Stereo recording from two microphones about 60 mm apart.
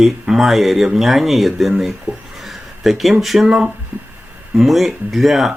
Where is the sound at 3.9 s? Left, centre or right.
Right.